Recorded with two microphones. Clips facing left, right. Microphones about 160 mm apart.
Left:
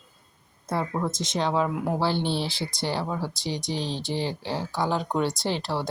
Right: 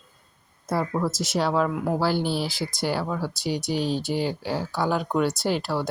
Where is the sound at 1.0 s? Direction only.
5° right (ahead or behind).